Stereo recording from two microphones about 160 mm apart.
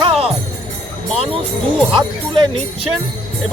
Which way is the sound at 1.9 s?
30° right (ahead or behind).